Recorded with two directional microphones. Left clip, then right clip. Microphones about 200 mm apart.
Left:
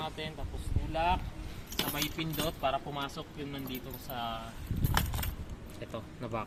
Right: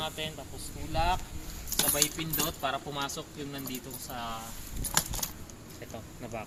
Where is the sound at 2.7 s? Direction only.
20° left (ahead or behind).